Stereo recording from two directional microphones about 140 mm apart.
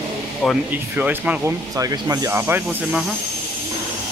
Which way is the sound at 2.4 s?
15° right (ahead or behind).